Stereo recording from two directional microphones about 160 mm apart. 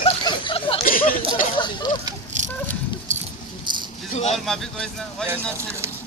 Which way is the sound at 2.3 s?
50° right (ahead or behind).